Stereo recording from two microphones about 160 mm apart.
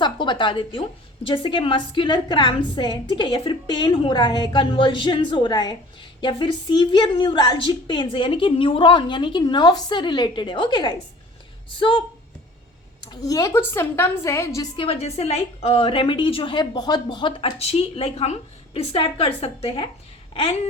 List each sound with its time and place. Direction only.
0.0 s a woman's voice: 30° left (ahead or behind)
14.8 s a woman's voice: 40° left (ahead or behind)